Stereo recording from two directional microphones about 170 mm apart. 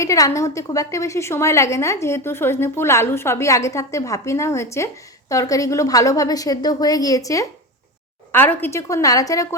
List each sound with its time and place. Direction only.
0.0 s a woman's voice: 20° left (ahead or behind)